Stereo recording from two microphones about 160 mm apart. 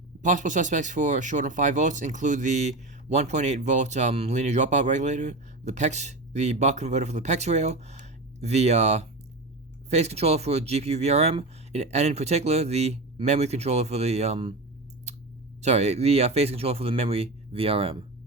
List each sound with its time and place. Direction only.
0.2 s speech: 50° right (ahead or behind)
15.1 s clicking: 45° right (ahead or behind)
15.6 s speech: 45° right (ahead or behind)